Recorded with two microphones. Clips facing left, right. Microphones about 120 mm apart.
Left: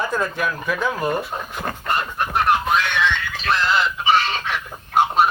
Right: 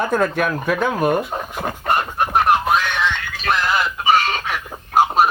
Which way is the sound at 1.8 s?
55° right (ahead or behind).